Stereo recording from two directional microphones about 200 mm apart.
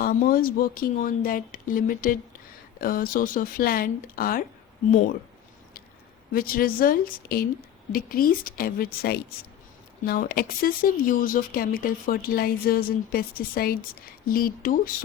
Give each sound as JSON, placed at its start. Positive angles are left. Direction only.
{"t": 0.0, "sound": "speech", "side_deg": 45}
{"t": 6.3, "sound": "speech", "side_deg": 45}